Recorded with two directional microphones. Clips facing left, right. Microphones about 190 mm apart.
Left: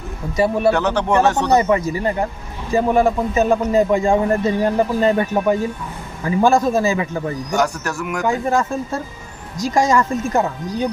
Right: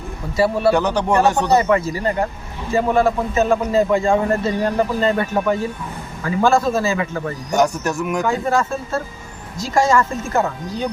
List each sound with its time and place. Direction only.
0.3 s a man's voice: 15° left (ahead or behind)
0.7 s speech: 15° right (ahead or behind)
1.5 s a man's voice: 15° left (ahead or behind)
7.5 s speech: 20° right (ahead or behind)
8.2 s a man's voice: 15° left (ahead or behind)